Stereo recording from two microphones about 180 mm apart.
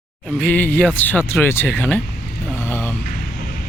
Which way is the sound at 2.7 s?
15° left (ahead or behind).